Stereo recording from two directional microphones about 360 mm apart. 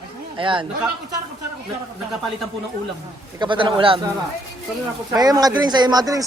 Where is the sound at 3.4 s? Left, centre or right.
Centre.